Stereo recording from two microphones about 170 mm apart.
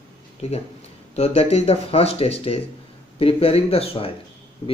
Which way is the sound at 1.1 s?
35° left (ahead or behind).